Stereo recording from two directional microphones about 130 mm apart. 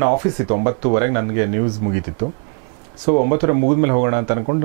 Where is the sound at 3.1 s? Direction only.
15° right (ahead or behind).